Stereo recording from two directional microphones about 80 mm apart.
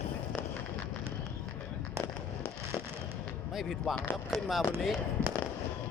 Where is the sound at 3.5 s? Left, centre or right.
Centre.